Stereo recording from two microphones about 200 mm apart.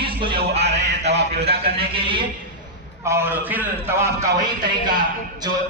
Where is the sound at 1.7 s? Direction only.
25° right (ahead or behind).